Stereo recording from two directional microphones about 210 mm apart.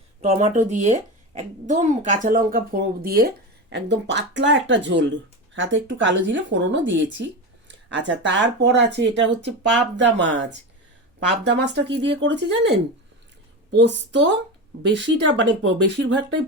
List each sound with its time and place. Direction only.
0.2 s a child's voice: 30° right (ahead or behind); by 12.7 s 60° right (ahead or behind)
13.7 s a child's voice: 55° right (ahead or behind)